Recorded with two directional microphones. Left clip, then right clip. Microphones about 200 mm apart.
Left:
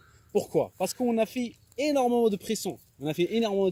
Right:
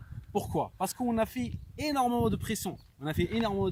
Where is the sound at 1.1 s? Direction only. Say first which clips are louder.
Left 3 dB; 90° right.